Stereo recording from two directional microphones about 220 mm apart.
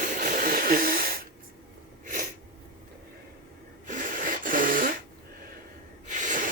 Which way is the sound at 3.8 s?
35° right (ahead or behind).